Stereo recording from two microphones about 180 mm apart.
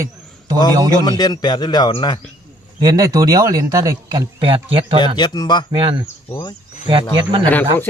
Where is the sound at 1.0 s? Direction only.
25° left (ahead or behind).